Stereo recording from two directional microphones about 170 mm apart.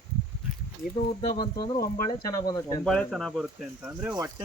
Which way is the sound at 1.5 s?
25° left (ahead or behind).